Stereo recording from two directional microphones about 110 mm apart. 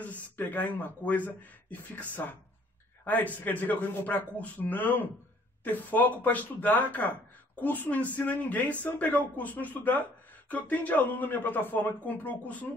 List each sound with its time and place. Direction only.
0.0 s speech: 15° left (ahead or behind)